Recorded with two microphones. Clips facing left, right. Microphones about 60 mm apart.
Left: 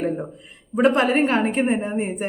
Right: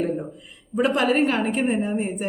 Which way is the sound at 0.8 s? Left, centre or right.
Left.